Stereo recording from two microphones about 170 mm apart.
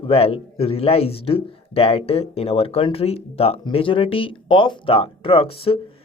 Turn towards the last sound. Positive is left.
turn(degrees=35)  # may be behind; listen again after turning